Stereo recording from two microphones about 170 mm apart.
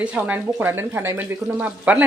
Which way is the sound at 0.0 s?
10° right (ahead or behind).